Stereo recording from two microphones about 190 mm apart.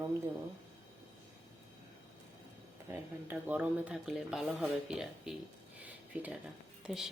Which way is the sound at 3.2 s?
10° right (ahead or behind).